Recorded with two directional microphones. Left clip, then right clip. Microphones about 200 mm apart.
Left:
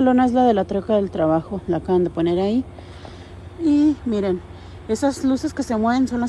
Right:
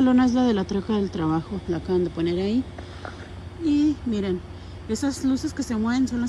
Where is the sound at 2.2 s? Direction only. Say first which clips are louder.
Left 5 dB; 10° left (ahead or behind).